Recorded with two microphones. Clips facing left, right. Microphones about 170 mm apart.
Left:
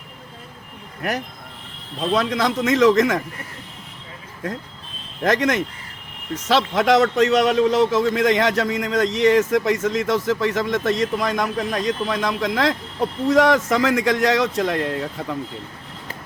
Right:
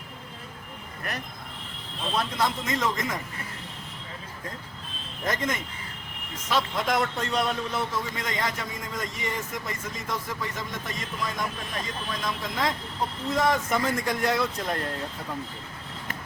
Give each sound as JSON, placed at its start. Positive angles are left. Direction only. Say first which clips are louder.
{"t": 2.0, "sound": "a man's voice", "louder": "left 7 dB", "side_deg": 90}
{"t": 5.2, "sound": "a man's voice", "louder": "left 10 dB", "side_deg": 90}
{"t": 15.2, "sound": "speech", "louder": "left 8 dB", "side_deg": 75}